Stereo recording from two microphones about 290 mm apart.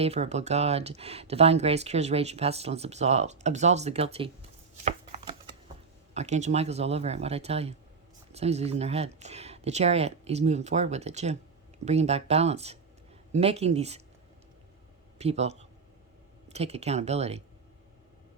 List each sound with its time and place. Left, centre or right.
0.0 s speech: right
4.9 s a sound: right
6.1 s speech: right
15.2 s speech: right